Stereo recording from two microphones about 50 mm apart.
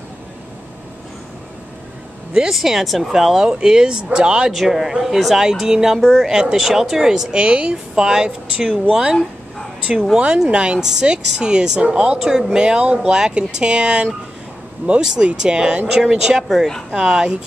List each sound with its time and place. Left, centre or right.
2.5 s speech: centre
3.5 s a woman's voice: centre
4.5 s a woman's voice: centre
16.4 s speech: centre